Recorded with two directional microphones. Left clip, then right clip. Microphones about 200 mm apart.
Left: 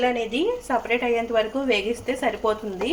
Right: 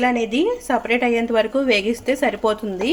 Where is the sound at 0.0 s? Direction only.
60° right (ahead or behind).